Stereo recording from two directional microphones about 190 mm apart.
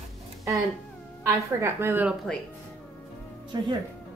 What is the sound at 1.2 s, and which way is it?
Speech, 10° right (ahead or behind).